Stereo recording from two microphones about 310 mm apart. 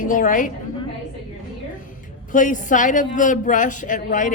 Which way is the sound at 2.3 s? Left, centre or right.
Left.